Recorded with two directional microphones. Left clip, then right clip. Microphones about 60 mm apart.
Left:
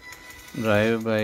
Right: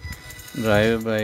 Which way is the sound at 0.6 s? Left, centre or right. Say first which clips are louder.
Right 2 dB; centre.